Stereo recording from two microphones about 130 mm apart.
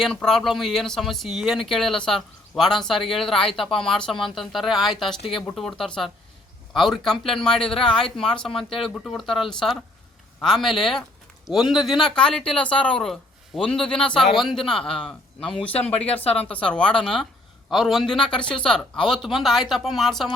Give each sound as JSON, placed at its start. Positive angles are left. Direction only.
{"t": 0.0, "sound": "speech", "side_deg": 5}
{"t": 15.9, "sound": "speech", "side_deg": 50}
{"t": 16.6, "sound": "speech", "side_deg": 10}